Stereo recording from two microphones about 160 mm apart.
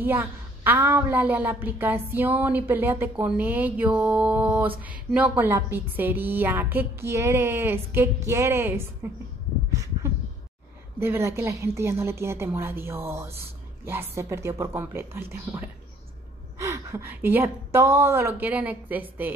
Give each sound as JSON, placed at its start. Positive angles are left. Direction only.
{"t": 0.0, "sound": "a woman's voice", "side_deg": -10}
{"t": 9.7, "sound": "a sound", "side_deg": -20}
{"t": 11.0, "sound": "a woman's voice", "side_deg": -15}
{"t": 16.5, "sound": "a woman's voice", "side_deg": -15}